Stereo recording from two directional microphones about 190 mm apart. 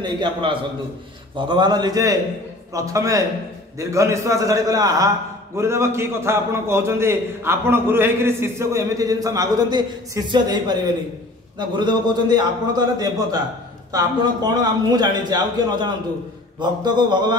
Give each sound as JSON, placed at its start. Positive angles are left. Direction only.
{"t": 0.0, "sound": "a man's voice", "side_deg": -25}